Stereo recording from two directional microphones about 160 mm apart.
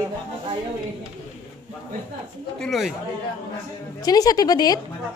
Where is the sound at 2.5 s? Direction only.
Centre (ahead or behind).